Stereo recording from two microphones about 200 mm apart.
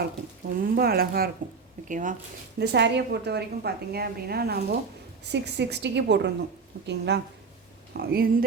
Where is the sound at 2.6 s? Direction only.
60° right (ahead or behind).